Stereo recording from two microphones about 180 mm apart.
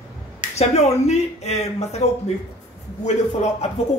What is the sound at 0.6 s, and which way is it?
A man's voice, 35° left (ahead or behind).